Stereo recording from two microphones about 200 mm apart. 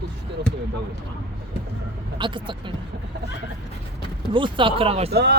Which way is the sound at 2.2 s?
25° right (ahead or behind).